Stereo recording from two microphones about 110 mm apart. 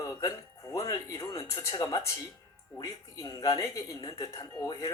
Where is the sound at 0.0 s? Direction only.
30° left (ahead or behind).